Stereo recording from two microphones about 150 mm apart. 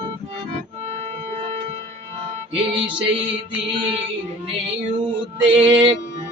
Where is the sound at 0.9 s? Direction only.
45° right (ahead or behind).